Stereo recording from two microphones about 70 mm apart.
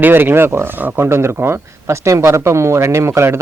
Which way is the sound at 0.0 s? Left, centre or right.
Right.